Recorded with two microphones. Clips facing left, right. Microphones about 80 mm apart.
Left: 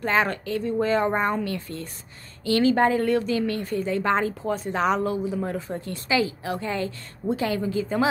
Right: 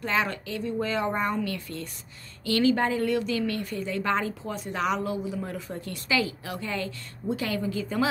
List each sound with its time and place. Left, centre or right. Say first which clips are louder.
0.0 s a woman's voice: left 4 dB; left